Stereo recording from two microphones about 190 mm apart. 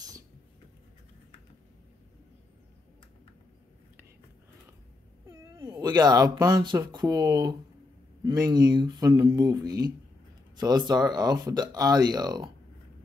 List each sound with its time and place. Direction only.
5.5 s speech: 15° right (ahead or behind)